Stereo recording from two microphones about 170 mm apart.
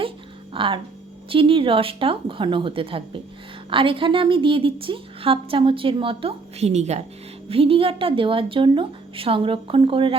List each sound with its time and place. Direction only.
0.5 s a woman's voice: 30° right (ahead or behind)